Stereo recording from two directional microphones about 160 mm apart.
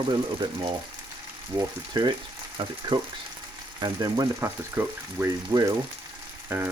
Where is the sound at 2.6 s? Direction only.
30° right (ahead or behind).